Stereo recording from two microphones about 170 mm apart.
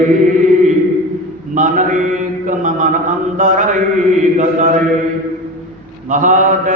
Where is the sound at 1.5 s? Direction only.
45° right (ahead or behind).